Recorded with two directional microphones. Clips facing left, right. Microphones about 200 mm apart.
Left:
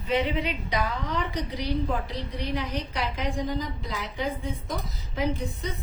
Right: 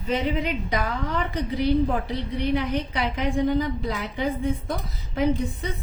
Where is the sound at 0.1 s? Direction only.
50° right (ahead or behind).